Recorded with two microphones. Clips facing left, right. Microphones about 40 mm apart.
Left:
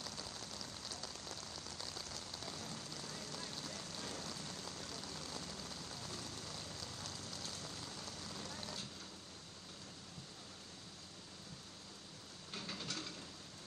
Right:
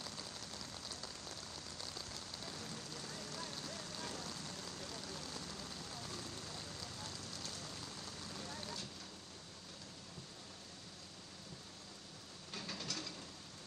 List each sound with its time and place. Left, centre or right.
3.0 s vehicle: right
4.7 s a sound: right
5.5 s rain on surface: right
8.0 s vehicle: right
12.5 s mechanisms: left